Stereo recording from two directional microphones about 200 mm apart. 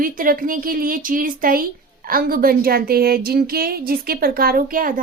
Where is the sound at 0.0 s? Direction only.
45° right (ahead or behind).